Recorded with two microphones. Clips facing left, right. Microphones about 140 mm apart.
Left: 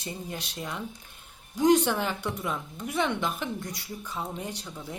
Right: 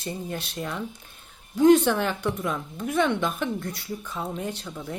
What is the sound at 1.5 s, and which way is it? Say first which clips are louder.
Speech: right 5 dB; 15° left (ahead or behind).